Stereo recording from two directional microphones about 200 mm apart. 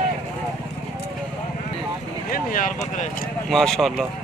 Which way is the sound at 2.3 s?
45° left (ahead or behind).